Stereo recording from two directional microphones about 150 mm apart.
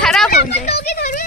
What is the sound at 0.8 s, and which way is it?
Speech, 90° left.